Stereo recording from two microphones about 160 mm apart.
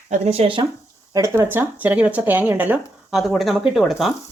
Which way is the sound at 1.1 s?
15° right (ahead or behind).